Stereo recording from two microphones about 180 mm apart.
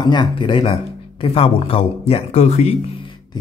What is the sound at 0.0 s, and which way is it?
Speech, 25° left (ahead or behind).